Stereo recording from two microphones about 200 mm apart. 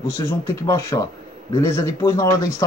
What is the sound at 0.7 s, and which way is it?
Speech, 15° left (ahead or behind).